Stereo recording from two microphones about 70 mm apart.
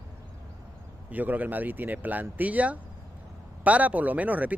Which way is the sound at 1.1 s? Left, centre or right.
Right.